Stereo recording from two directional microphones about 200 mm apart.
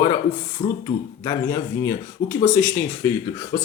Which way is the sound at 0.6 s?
30° left (ahead or behind).